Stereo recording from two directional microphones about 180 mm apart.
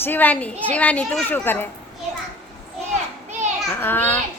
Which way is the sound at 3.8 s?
10° left (ahead or behind).